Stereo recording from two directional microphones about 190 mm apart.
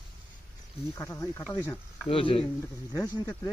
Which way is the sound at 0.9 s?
15° left (ahead or behind).